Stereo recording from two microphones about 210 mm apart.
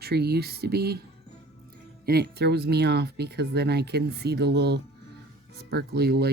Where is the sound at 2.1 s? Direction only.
50° right (ahead or behind).